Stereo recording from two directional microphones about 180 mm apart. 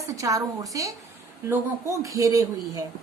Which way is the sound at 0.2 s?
20° right (ahead or behind).